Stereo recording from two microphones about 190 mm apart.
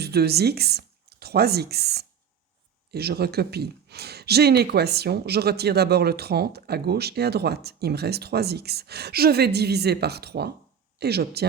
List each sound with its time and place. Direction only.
0.0 s speech: 60° right (ahead or behind)